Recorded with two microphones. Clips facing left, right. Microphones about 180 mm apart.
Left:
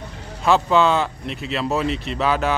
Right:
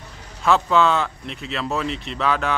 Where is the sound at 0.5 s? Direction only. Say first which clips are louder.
Left 1 dB; centre (ahead or behind).